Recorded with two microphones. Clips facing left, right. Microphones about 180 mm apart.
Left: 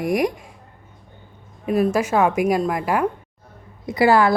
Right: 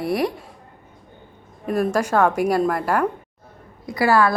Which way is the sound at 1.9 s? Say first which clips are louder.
Even; 10° left (ahead or behind).